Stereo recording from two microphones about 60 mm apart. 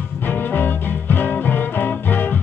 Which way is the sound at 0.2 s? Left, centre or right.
Left.